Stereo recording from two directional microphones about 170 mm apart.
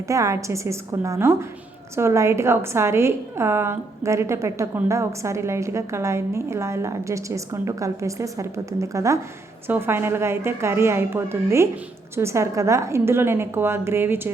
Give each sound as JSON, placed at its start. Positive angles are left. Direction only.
{"t": 0.1, "sound": "a woman's voice", "side_deg": -20}